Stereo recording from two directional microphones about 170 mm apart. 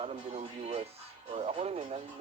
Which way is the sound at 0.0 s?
40° right (ahead or behind).